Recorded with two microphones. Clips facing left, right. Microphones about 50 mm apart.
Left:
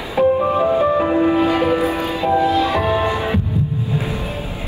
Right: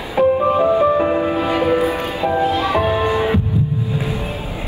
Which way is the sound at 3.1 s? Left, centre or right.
Right.